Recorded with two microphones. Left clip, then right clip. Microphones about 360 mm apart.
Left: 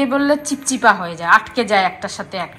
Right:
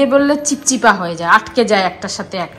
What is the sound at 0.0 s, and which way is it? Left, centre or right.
A woman's voice, centre.